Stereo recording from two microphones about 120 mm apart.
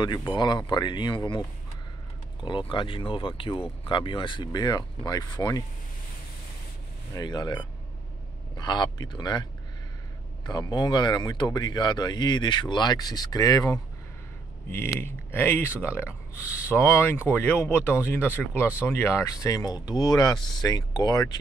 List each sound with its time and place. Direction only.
0.3 s speech: 40° left (ahead or behind)
2.4 s speech: 45° left (ahead or behind)
7.2 s speech: 35° left (ahead or behind)
15.0 s speech: 20° left (ahead or behind)